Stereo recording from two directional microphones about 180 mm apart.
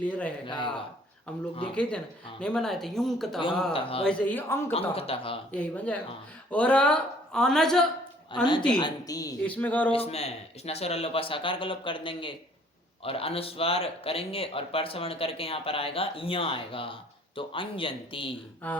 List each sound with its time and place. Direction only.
0.0 s speech: 10° left (ahead or behind)
0.4 s a woman's voice: 25° left (ahead or behind)
1.6 s speech: 5° left (ahead or behind)
3.7 s speech: 30° left (ahead or behind)
4.0 s speech: 5° left (ahead or behind)
4.7 s speech: 30° left (ahead or behind)
5.5 s speech: 5° left (ahead or behind)
8.3 s a woman's voice: 25° left (ahead or behind)
9.4 s speech: 10° left (ahead or behind)
9.9 s speech: 35° left (ahead or behind)